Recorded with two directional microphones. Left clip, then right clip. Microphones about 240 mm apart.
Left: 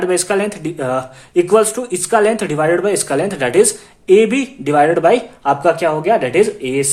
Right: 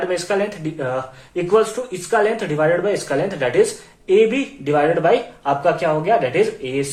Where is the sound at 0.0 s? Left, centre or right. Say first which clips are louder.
Left 4 dB; left.